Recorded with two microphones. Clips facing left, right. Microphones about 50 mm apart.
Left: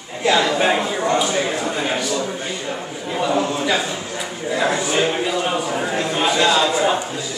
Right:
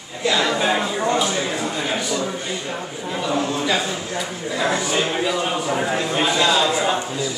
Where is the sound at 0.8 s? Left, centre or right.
Centre.